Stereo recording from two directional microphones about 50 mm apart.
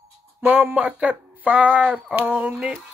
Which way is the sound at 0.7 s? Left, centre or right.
Right.